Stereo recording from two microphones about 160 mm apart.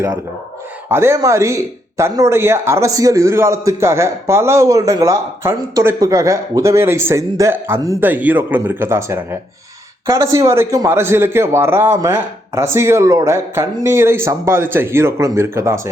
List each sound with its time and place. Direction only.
0.9 s a man's voice: 15° right (ahead or behind)